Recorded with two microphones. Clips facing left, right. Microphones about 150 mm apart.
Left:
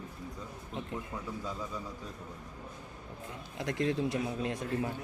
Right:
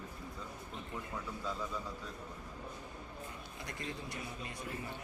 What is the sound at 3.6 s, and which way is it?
A man's voice, 90° left.